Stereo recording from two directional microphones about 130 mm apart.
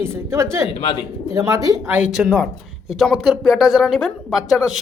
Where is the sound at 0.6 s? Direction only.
45° left (ahead or behind).